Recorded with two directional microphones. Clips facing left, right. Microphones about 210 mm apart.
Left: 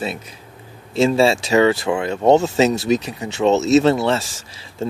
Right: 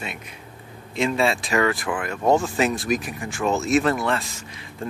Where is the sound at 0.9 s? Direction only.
30° left (ahead or behind).